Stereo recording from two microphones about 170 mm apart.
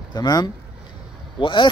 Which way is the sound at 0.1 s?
25° left (ahead or behind).